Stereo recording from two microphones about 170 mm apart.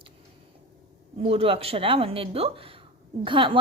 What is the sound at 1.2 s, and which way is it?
A woman's voice, 35° right (ahead or behind).